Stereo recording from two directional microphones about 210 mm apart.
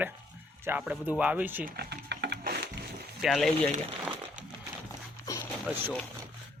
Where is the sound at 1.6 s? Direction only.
50° right (ahead or behind).